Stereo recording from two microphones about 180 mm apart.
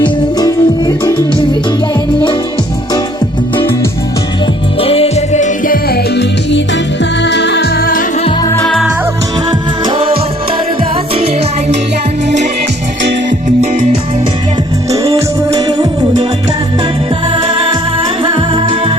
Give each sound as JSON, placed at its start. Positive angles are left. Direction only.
{"t": 0.0, "sound": "music", "side_deg": 20}
{"t": 4.8, "sound": "music", "side_deg": 35}
{"t": 7.0, "sound": "music", "side_deg": 75}
{"t": 8.4, "sound": "music", "side_deg": 10}
{"t": 9.8, "sound": "music", "side_deg": -30}
{"t": 15.4, "sound": "music", "side_deg": -20}
{"t": 18.2, "sound": "music", "side_deg": -25}